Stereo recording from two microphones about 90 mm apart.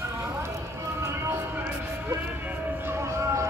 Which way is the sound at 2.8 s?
30° right (ahead or behind).